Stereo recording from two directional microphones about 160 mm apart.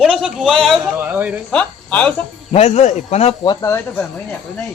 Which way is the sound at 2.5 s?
40° left (ahead or behind).